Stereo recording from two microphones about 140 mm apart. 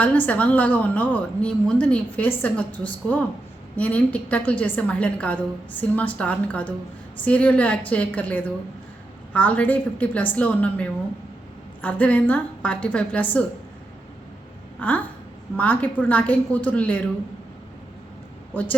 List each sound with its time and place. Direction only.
0.0 s a woman's voice: 10° left (ahead or behind)
14.8 s a woman's voice: 10° left (ahead or behind)
18.5 s a woman's voice: 10° left (ahead or behind)